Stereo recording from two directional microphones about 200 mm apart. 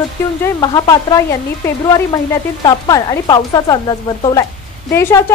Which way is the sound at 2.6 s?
20° left (ahead or behind).